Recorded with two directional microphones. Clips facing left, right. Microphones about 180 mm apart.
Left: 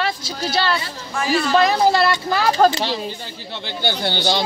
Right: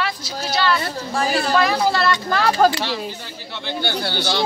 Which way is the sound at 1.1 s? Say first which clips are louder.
Left 1 dB; 35° right (ahead or behind).